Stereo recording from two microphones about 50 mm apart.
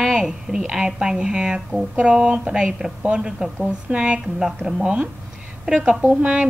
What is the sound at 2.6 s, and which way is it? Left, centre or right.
A woman's voice, centre.